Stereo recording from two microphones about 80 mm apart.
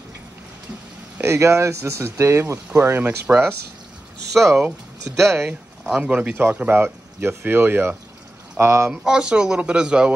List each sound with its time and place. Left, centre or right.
1.2 s speech: right
4.3 s speech: centre
5.1 s speech: right
5.9 s speech: centre; by 8.9 s right
8.9 s speech: centre